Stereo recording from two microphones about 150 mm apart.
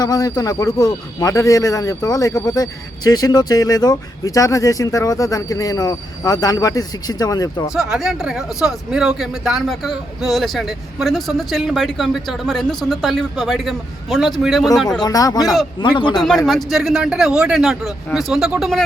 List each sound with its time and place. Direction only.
0.0 s speech: 25° left (ahead or behind)
7.7 s speech: 5° right (ahead or behind)
15.0 s speech: 25° left (ahead or behind)
16.2 s speech: centre (ahead or behind)